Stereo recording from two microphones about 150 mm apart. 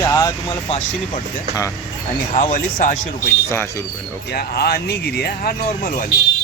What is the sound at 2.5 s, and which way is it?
Speech, 65° left (ahead or behind).